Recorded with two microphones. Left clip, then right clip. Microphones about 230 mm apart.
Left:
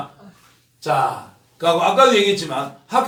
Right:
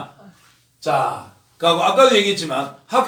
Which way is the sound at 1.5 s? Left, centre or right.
Centre.